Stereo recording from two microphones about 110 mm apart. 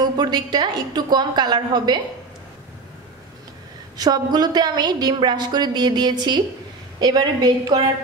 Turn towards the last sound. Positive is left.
turn(degrees=-40)  # may be behind; listen again after turning